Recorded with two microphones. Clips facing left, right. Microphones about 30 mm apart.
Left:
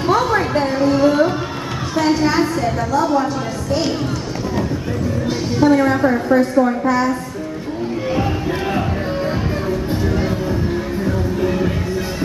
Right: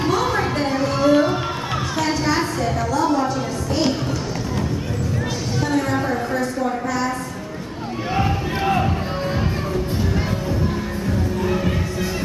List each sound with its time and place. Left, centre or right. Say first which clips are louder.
0.2 s a sound: left 4 dB; centre
5.6 s a woman's voice: left 8 dB; left
8.2 s speech: left 2 dB; centre
11.4 s music: left 4 dB; centre